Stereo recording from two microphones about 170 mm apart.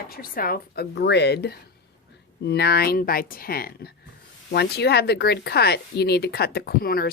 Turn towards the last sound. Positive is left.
turn(degrees=60)  # may be behind; listen again after turning